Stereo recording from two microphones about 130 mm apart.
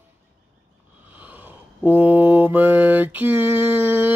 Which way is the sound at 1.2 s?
15° right (ahead or behind).